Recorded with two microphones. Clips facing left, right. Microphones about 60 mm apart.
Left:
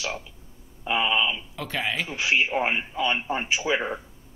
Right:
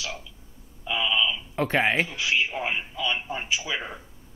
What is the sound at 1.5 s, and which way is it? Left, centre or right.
Speech, right.